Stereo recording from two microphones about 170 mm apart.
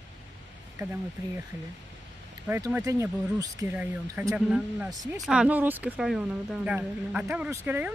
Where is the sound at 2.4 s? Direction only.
10° right (ahead or behind).